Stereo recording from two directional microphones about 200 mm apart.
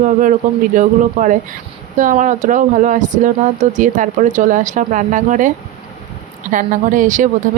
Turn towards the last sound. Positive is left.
turn(degrees=-40)  # may be behind; listen again after turning